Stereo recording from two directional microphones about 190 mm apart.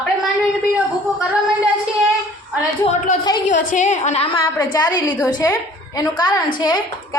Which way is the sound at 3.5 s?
40° left (ahead or behind).